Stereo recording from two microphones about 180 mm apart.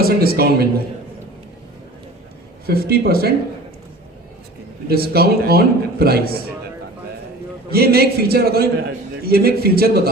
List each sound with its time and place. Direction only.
0.0 s a man's voice: 55° right (ahead or behind)
2.6 s a man's voice: 55° right (ahead or behind)
4.9 s a man's voice: 60° right (ahead or behind)
7.7 s a man's voice: 60° right (ahead or behind)